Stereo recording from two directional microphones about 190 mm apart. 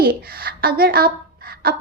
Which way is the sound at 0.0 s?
50° right (ahead or behind).